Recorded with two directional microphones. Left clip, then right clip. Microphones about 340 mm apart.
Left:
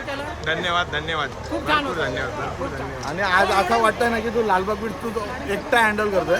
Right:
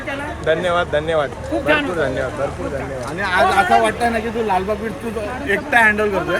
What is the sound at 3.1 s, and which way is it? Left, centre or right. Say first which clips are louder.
A man's voice: right 2 dB; left.